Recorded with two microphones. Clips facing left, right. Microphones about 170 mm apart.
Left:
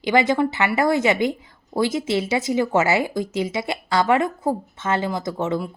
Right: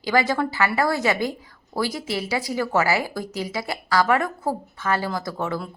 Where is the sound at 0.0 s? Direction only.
20° left (ahead or behind).